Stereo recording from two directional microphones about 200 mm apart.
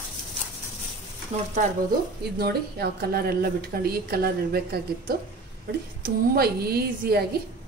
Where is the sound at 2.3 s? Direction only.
50° right (ahead or behind).